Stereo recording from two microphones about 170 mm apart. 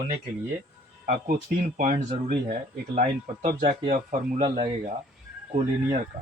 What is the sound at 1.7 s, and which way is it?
Speech, 50° right (ahead or behind).